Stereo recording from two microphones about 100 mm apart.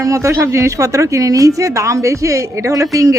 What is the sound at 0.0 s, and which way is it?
A woman's voice, 30° right (ahead or behind).